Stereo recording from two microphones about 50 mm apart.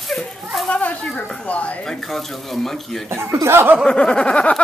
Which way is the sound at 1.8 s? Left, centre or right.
Centre.